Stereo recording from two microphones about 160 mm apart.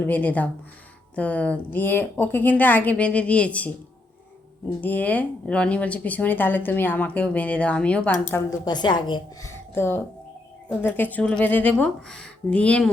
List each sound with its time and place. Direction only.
0.0 s speech: 10° left (ahead or behind)
4.8 s speech: 10° left (ahead or behind)
8.6 s a woman's voice: 25° left (ahead or behind)
9.5 s music: 15° left (ahead or behind)
10.7 s speech: 10° left (ahead or behind)